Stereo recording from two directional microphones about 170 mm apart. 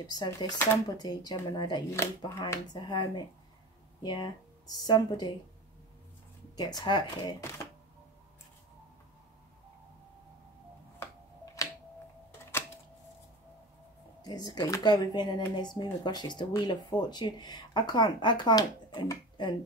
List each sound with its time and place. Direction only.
0.0 s speech: 25° left (ahead or behind)
6.5 s speech: 25° left (ahead or behind)
14.2 s speech: 25° left (ahead or behind)